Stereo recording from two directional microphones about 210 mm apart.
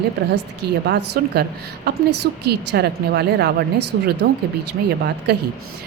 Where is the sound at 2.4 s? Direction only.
50° right (ahead or behind).